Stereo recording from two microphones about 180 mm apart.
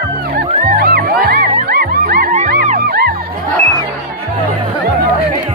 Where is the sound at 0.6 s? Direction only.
55° right (ahead or behind).